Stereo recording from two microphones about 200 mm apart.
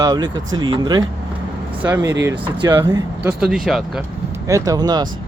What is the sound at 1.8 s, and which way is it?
Speech, 10° right (ahead or behind).